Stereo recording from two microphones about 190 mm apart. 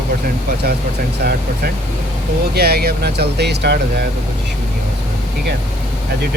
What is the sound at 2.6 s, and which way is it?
Speech, 55° right (ahead or behind).